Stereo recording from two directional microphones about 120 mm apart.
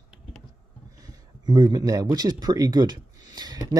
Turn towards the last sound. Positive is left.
turn(degrees=-35)  # may be behind; listen again after turning